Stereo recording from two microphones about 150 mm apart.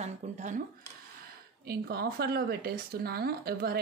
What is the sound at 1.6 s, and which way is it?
Speech, 90° right.